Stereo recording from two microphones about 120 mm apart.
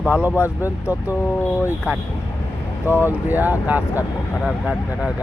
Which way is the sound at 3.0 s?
15° right (ahead or behind).